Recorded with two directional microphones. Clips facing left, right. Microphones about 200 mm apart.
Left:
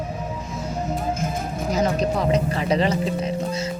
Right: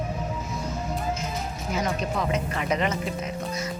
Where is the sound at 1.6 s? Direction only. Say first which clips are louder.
Left 7 dB; 35° left (ahead or behind).